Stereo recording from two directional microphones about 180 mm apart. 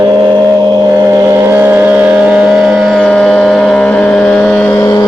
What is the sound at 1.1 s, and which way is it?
Vehicle, 15° right (ahead or behind).